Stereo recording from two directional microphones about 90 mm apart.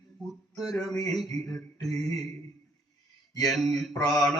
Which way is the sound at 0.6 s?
Centre (ahead or behind).